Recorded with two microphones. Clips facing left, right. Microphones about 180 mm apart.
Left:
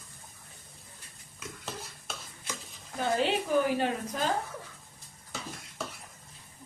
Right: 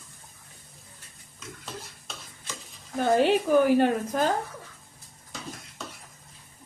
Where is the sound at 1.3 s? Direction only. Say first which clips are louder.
Even; 5° left (ahead or behind).